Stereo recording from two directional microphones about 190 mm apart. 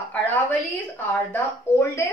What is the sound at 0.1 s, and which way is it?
A woman's voice, 10° left (ahead or behind).